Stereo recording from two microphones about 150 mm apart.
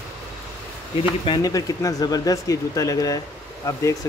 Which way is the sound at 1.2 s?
25° left (ahead or behind).